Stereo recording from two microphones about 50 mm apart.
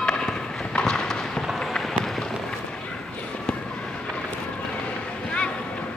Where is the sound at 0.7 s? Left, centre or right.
Centre.